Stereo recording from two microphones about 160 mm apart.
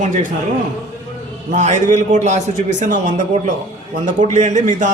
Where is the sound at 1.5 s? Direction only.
50° right (ahead or behind).